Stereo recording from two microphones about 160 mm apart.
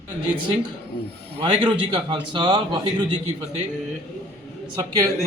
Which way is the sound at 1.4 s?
30° right (ahead or behind).